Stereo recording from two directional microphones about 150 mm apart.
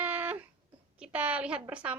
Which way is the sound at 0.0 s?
10° right (ahead or behind).